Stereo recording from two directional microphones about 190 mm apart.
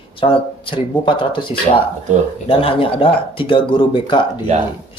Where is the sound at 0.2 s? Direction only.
25° left (ahead or behind).